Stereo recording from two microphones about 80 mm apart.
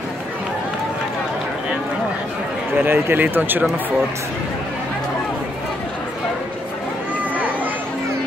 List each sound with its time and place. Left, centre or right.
2.8 s speech: right